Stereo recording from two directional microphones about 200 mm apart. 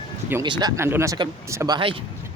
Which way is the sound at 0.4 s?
15° right (ahead or behind).